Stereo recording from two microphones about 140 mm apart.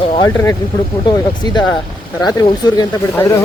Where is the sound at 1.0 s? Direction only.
30° left (ahead or behind).